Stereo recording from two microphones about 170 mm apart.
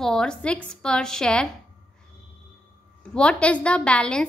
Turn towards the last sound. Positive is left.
turn(degrees=5)  # may be behind; listen again after turning